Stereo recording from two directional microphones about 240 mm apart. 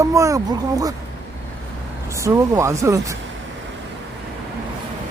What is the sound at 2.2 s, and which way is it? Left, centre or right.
Speech, centre.